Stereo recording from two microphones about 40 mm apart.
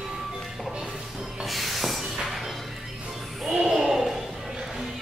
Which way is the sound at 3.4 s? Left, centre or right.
Right.